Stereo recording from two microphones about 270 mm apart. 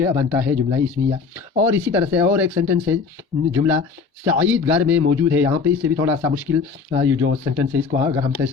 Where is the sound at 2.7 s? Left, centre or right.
Right.